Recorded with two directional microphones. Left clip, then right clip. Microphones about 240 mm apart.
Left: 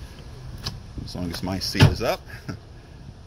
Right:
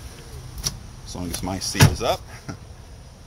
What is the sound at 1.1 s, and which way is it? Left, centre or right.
Speech, centre.